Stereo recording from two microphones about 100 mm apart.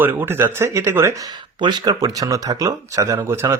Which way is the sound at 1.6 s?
40° right (ahead or behind).